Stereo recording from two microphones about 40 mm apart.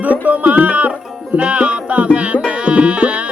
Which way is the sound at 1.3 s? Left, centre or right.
Right.